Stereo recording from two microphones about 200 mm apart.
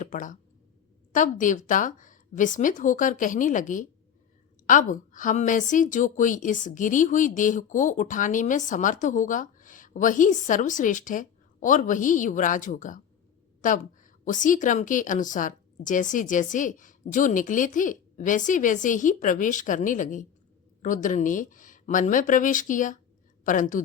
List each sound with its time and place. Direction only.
0.0 s a woman's voice: 40° left (ahead or behind)